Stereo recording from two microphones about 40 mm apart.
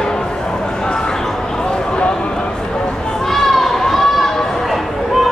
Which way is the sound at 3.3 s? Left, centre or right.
Centre.